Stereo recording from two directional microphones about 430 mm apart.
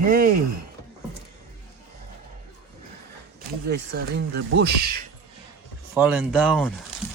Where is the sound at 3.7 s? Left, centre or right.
Right.